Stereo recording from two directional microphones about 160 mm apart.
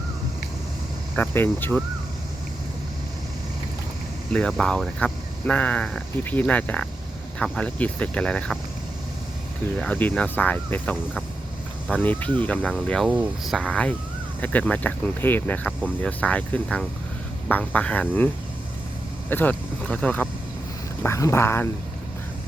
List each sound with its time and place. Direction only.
1.1 s speech: 10° left (ahead or behind)
4.3 s speech: 5° left (ahead or behind)
9.7 s speech: 10° left (ahead or behind)
19.3 s speech: 10° left (ahead or behind)